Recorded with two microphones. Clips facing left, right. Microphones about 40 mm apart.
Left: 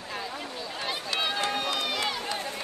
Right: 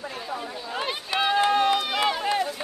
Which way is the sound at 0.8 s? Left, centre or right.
Right.